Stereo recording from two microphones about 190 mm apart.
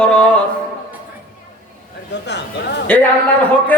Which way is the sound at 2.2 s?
65° left (ahead or behind).